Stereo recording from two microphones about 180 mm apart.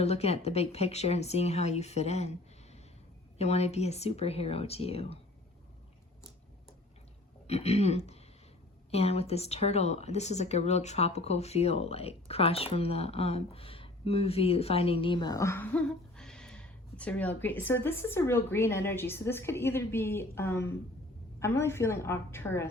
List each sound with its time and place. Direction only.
0.0 s speech: 35° left (ahead or behind)
3.3 s speech: 35° left (ahead or behind)
7.4 s a woman's voice: 35° left (ahead or behind); by 22.7 s 15° left (ahead or behind)